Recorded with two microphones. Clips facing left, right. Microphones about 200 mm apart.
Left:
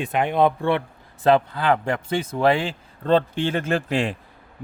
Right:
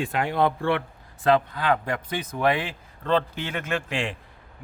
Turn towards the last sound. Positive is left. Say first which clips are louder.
# left 5 dB
turn(degrees=40)  # may be behind; listen again after turning